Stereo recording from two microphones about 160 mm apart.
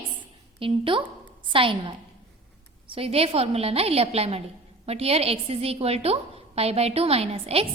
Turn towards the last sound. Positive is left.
turn(degrees=-40)  # may be behind; listen again after turning